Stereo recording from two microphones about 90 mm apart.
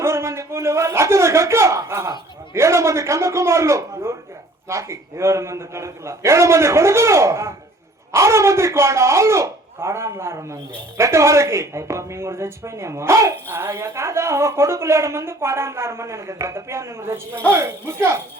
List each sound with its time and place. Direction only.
0.0 s a man's voice: 30° right (ahead or behind)